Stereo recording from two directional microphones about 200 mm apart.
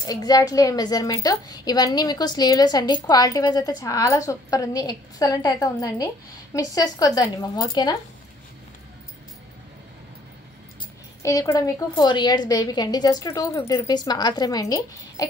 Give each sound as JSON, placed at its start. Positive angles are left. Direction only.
{"t": 0.0, "sound": "a woman's voice", "side_deg": 20}
{"t": 11.2, "sound": "a woman's voice", "side_deg": 15}